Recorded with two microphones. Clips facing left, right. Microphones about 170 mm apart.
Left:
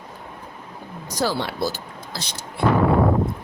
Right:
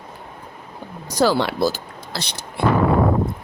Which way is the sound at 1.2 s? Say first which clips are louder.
Right 6 dB; 90° right.